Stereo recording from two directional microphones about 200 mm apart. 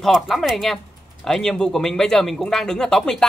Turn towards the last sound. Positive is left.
turn(degrees=0)  # may be behind; listen again after turning